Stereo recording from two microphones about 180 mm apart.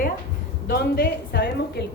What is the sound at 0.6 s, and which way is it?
A woman's voice, 60° left (ahead or behind).